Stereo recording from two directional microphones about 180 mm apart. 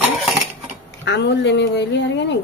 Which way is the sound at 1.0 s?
70° left (ahead or behind).